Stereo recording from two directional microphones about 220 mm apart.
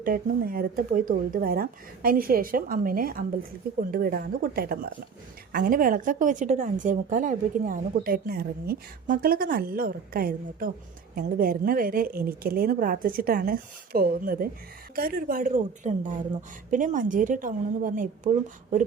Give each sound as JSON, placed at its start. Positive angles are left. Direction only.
{"t": 0.0, "sound": "speech", "side_deg": -40}